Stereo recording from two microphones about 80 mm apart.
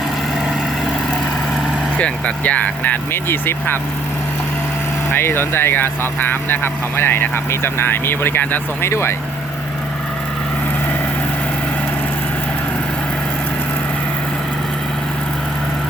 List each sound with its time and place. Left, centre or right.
2.0 s speech: centre
5.1 s speech: left